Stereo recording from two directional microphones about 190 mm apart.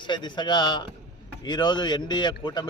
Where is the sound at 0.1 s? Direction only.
25° left (ahead or behind).